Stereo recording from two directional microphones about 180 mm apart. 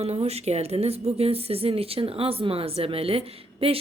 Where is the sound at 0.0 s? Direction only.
35° right (ahead or behind).